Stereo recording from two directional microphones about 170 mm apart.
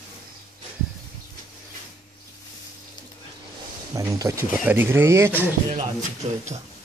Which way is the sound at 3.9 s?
20° right (ahead or behind).